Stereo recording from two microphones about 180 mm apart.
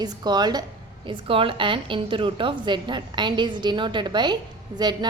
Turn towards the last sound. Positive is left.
turn(degrees=-25)  # may be behind; listen again after turning